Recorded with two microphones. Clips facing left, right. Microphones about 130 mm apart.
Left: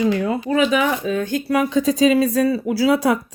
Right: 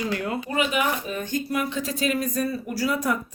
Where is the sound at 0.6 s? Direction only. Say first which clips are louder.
Left 5 dB; 90° left.